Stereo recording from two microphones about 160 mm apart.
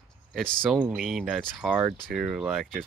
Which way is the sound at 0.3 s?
5° left (ahead or behind).